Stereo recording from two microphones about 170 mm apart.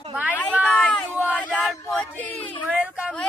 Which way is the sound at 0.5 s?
5° left (ahead or behind).